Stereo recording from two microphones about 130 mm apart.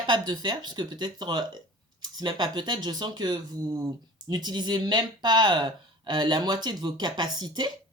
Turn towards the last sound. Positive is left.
turn(degrees=-35)  # may be behind; listen again after turning